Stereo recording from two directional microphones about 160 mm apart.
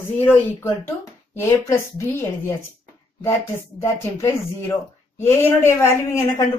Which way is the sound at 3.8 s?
15° left (ahead or behind).